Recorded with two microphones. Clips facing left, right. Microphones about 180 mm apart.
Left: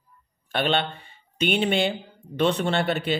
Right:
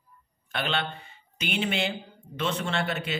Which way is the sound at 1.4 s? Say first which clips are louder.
Left 6 dB; 30° left (ahead or behind).